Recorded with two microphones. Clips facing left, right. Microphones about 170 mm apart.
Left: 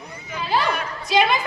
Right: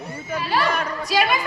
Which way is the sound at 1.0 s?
20° left (ahead or behind).